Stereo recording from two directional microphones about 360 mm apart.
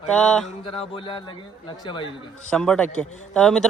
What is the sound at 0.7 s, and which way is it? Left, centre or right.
Speech, centre.